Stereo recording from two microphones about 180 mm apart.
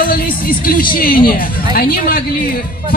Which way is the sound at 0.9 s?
55° left (ahead or behind).